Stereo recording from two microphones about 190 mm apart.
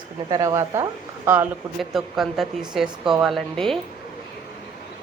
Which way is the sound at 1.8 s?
Centre (ahead or behind).